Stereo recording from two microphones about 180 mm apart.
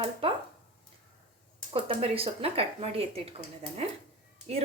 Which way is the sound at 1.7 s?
30° right (ahead or behind).